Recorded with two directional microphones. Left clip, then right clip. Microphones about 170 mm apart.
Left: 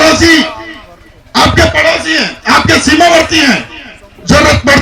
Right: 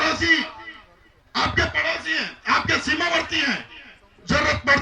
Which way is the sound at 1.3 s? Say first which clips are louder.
Left 14 dB; 40° left (ahead or behind).